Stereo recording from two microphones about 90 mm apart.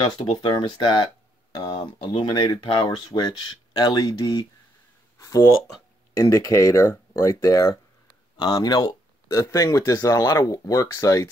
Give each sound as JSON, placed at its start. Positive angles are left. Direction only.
{"t": 0.0, "sound": "speech", "side_deg": 55}
{"t": 6.1, "sound": "speech", "side_deg": 40}
{"t": 8.4, "sound": "speech", "side_deg": 45}